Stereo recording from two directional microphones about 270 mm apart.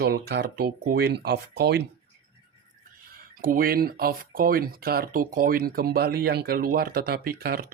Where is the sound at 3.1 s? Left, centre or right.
Right.